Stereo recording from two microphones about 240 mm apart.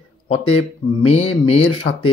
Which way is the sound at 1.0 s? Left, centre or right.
Left.